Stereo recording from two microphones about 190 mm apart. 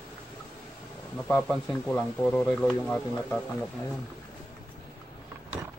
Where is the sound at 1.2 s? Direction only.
5° left (ahead or behind).